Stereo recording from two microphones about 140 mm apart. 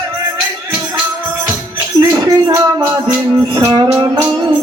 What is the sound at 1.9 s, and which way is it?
Music, 25° right (ahead or behind).